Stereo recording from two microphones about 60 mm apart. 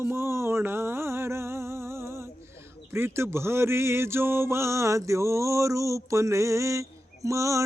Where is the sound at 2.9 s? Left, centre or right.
Right.